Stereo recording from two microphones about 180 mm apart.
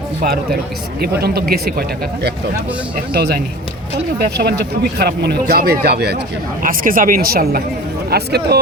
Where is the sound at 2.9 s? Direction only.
60° right (ahead or behind).